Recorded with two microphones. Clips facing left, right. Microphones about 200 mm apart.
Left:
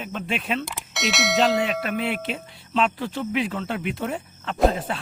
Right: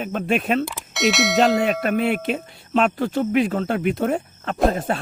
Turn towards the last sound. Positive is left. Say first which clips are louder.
# right 1 dB
turn(degrees=-50)  # may be behind; listen again after turning